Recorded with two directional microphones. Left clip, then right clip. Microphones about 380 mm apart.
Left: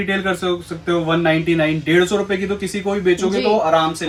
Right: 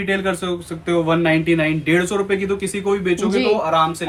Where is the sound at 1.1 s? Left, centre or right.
Centre.